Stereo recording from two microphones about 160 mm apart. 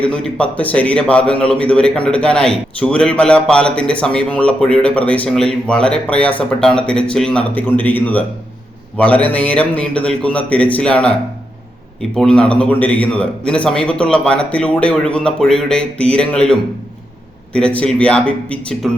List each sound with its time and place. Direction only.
0.0 s a man's voice: 5° left (ahead or behind)
12.1 s a man's voice: 5° left (ahead or behind)